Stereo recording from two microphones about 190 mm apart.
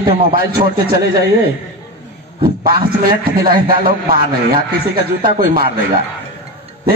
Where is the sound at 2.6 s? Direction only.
50° right (ahead or behind).